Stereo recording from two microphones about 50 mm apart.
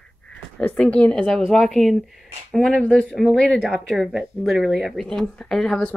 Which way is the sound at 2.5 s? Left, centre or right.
Centre.